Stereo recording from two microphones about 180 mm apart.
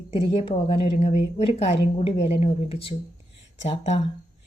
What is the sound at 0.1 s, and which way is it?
A woman's voice, 30° left (ahead or behind).